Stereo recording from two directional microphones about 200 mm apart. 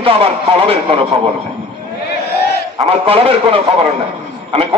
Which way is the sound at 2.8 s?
30° right (ahead or behind).